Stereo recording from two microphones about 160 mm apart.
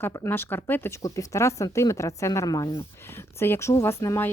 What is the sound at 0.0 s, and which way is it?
Speech, 15° left (ahead or behind).